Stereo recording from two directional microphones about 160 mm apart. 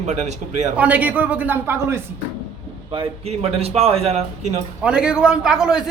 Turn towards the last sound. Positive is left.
turn(degrees=-5)  # may be behind; listen again after turning